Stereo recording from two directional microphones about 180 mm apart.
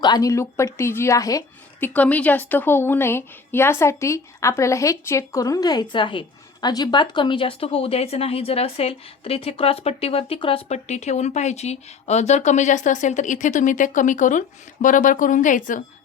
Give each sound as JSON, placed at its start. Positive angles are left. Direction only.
{"t": 0.0, "sound": "a woman's voice", "side_deg": 20}
{"t": 1.9, "sound": "a woman's voice", "side_deg": 10}